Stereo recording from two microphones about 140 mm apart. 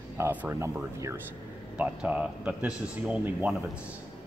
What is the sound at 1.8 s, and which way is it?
Speech, 10° right (ahead or behind).